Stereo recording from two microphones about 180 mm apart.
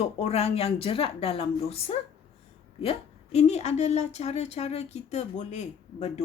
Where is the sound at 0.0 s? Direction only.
35° left (ahead or behind).